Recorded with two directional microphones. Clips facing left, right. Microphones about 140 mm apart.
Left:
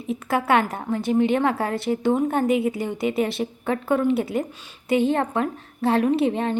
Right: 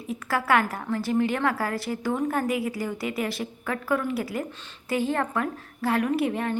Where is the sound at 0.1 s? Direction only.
20° left (ahead or behind).